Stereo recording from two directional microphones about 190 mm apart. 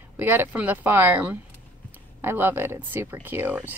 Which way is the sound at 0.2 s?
10° right (ahead or behind).